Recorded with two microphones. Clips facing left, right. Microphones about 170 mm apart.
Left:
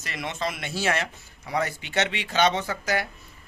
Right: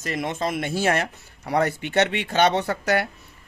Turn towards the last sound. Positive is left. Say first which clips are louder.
# right 5 dB
turn(degrees=-65)  # may be behind; listen again after turning